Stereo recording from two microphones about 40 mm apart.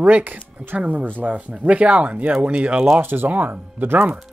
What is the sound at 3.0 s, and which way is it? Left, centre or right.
Speech, right.